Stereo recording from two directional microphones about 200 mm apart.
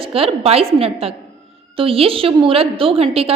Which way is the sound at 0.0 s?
30° right (ahead or behind).